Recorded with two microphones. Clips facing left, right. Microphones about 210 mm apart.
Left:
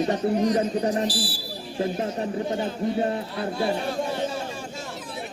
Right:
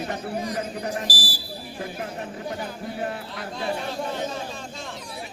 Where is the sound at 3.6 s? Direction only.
10° left (ahead or behind).